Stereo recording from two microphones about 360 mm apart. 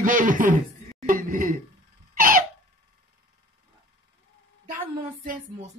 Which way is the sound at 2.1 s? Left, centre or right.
Right.